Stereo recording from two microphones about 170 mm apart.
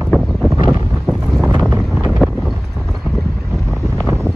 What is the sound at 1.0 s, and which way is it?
Wind noise, centre (ahead or behind).